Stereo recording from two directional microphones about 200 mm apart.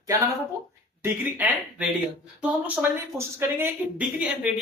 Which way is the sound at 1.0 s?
10° right (ahead or behind).